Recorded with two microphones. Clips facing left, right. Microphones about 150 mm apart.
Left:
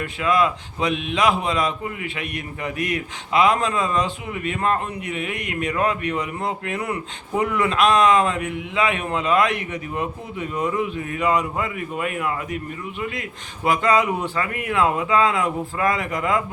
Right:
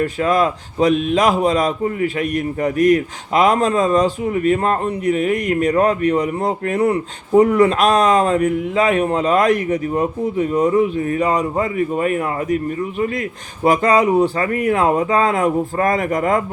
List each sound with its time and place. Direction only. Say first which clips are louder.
0.0 s a man's voice: right 4 dB; 40° right (ahead or behind)
13.7 s speech: right 5 dB; 40° right (ahead or behind)